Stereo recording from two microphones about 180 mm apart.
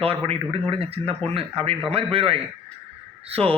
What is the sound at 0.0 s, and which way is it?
A man's voice, 35° right (ahead or behind).